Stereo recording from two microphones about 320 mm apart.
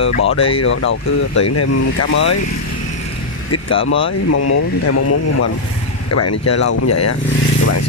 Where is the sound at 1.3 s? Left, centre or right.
Left.